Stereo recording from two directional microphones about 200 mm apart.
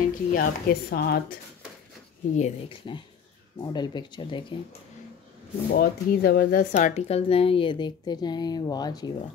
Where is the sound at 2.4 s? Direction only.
30° left (ahead or behind).